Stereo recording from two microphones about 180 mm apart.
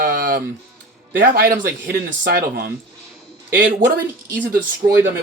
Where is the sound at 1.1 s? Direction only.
50° right (ahead or behind).